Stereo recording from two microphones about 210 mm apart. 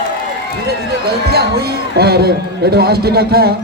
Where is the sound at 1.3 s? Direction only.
50° right (ahead or behind).